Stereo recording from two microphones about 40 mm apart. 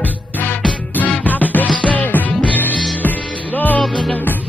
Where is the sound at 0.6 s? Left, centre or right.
Centre.